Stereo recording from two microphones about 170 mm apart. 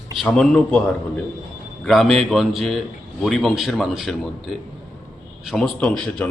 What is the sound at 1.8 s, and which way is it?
A man's voice, centre (ahead or behind).